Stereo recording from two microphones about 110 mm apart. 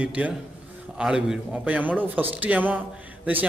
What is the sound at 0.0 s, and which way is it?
Speech, 10° right (ahead or behind).